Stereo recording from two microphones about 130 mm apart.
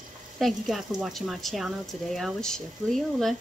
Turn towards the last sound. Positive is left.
turn(degrees=0)  # may be behind; listen again after turning